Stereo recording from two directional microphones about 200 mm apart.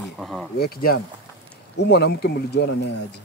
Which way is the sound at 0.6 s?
50° left (ahead or behind).